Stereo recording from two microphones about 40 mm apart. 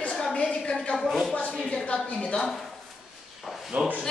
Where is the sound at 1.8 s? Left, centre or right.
Left.